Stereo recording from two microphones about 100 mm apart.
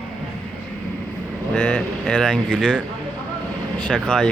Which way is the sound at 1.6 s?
10° left (ahead or behind).